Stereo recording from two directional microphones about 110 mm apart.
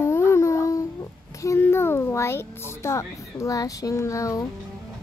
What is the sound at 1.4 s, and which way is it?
Music, 25° left (ahead or behind).